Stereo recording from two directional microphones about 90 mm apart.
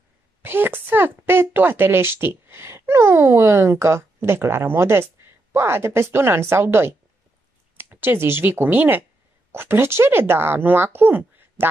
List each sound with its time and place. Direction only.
0.4 s a woman's voice: 25° right (ahead or behind)